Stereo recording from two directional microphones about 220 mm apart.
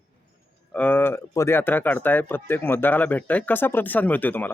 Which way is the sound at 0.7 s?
5° left (ahead or behind).